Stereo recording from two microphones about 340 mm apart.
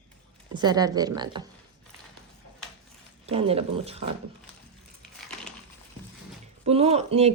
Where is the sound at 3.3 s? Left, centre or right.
Centre.